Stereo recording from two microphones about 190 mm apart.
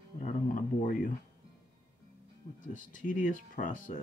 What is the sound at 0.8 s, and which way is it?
Speech, 45° left (ahead or behind).